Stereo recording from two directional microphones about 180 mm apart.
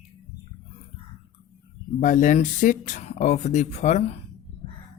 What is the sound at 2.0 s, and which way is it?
Speech, 45° left (ahead or behind).